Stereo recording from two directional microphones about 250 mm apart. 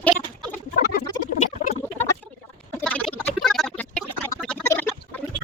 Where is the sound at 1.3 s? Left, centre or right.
Left.